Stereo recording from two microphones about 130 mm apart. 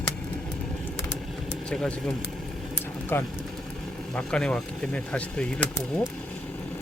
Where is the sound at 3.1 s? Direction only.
15° left (ahead or behind).